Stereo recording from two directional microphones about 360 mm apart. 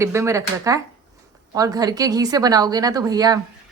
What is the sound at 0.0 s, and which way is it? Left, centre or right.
Speech, centre.